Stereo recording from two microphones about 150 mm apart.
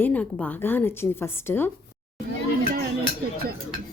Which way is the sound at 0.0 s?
10° left (ahead or behind).